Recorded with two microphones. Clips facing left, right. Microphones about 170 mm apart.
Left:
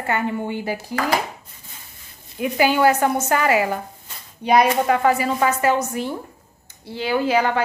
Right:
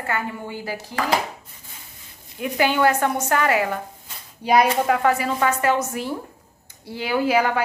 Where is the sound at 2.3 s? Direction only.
5° left (ahead or behind).